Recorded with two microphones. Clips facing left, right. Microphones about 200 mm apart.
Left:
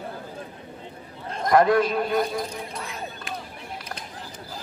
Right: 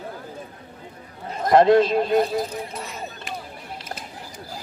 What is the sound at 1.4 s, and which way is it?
A man's voice, 25° right (ahead or behind).